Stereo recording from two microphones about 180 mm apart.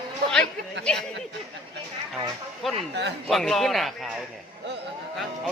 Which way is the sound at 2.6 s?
Centre (ahead or behind).